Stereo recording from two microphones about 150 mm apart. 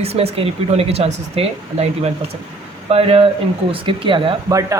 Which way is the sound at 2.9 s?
40° right (ahead or behind).